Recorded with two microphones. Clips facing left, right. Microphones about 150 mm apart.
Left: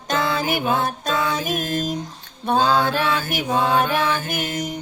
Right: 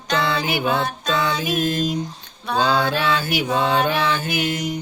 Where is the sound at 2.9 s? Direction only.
50° left (ahead or behind).